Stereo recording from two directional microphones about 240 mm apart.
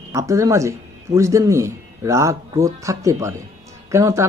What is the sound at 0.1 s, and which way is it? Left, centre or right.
Speech, centre.